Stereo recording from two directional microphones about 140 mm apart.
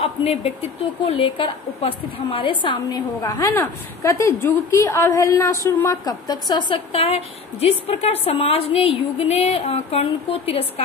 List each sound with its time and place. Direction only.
0.0 s a woman's voice: 45° left (ahead or behind)
6.9 s a woman's voice: 45° left (ahead or behind)